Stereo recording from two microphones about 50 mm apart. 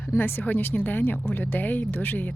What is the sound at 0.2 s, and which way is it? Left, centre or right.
Speech, left.